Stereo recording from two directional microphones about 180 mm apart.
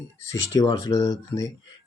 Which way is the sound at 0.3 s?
20° left (ahead or behind).